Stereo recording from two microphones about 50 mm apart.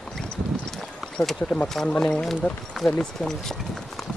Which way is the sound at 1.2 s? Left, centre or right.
Left.